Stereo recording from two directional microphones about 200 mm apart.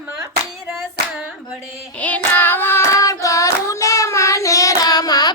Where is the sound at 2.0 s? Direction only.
5° left (ahead or behind).